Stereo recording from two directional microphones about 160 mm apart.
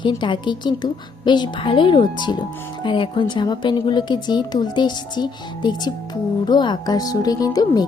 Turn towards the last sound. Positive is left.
turn(degrees=25)  # may be behind; listen again after turning